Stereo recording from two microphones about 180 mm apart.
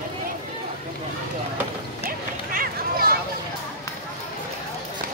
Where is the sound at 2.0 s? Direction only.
50° right (ahead or behind).